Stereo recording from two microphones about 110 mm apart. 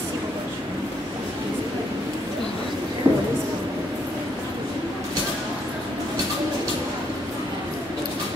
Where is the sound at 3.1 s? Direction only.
25° right (ahead or behind).